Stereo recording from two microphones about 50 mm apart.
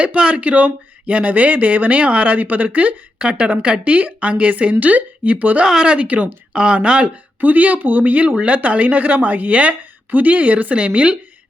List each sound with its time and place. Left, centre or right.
0.2 s speech: right
5.6 s speech: centre
5.9 s speech: right
7.4 s speech: right